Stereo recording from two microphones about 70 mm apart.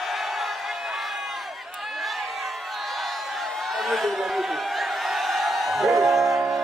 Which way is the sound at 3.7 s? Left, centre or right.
Centre.